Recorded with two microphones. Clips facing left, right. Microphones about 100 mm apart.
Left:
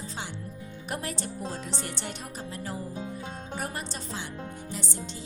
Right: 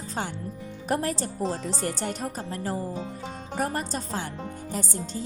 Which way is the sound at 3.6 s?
45° right (ahead or behind).